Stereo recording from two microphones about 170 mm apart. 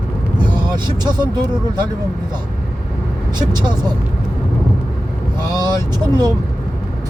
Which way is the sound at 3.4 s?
25° right (ahead or behind).